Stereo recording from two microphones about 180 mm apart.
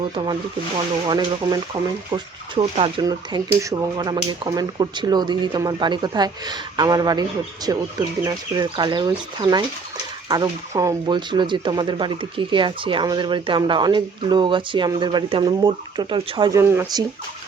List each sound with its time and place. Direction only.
0.0 s speech: 25° right (ahead or behind)